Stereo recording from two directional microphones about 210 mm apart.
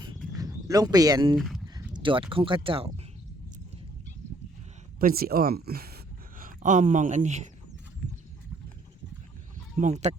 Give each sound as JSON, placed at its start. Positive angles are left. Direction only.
{"t": 0.3, "sound": "speech", "side_deg": -15}
{"t": 1.4, "sound": "speech", "side_deg": 0}
{"t": 1.6, "sound": "speech", "side_deg": -20}
{"t": 4.9, "sound": "speech", "side_deg": -45}
{"t": 9.7, "sound": "speech", "side_deg": -35}